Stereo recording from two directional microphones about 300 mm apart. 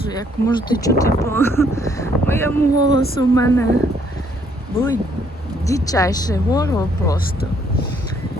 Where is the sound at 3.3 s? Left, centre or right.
Centre.